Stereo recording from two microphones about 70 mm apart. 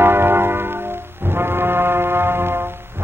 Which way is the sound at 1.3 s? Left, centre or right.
Right.